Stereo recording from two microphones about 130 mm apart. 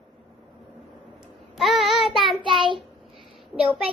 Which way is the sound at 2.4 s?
40° right (ahead or behind).